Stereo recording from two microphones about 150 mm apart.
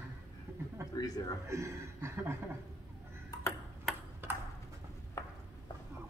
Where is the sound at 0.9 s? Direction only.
25° left (ahead or behind).